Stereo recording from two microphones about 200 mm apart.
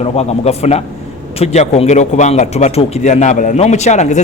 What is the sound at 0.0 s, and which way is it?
A man's voice, 30° left (ahead or behind).